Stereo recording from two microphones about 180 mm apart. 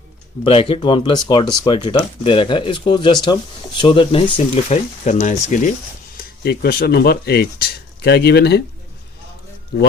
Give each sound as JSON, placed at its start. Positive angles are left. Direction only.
{"t": 0.4, "sound": "speech", "side_deg": 30}
{"t": 6.1, "sound": "speech", "side_deg": 60}